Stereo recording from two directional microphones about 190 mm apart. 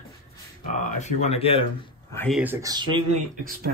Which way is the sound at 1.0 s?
35° left (ahead or behind).